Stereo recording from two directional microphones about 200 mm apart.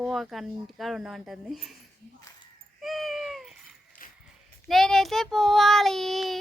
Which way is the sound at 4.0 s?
45° left (ahead or behind).